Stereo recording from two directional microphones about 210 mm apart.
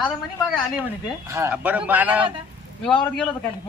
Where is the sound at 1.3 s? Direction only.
10° right (ahead or behind).